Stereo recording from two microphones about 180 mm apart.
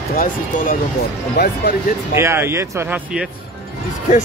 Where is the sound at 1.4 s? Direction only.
65° left (ahead or behind).